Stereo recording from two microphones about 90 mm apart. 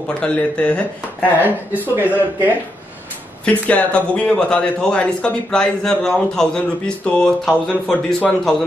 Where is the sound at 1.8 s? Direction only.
20° right (ahead or behind).